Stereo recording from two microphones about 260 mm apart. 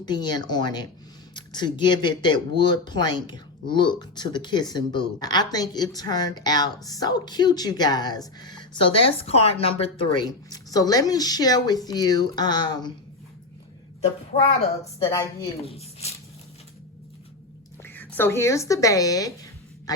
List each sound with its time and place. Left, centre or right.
0.0 s a woman's voice: centre
14.6 s a woman's voice: left
15.6 s speech: left
17.8 s speech: centre